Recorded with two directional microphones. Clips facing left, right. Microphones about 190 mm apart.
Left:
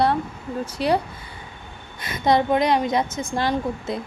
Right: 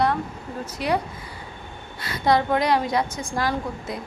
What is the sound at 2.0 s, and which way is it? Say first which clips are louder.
Speech: left 1 dB; 20° left (ahead or behind).